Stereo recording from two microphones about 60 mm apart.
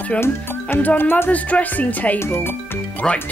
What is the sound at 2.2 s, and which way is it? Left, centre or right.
Speech, left.